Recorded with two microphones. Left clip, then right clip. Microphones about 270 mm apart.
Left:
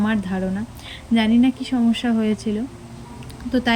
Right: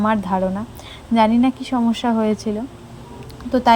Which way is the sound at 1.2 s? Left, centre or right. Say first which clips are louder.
Right 2 dB; centre.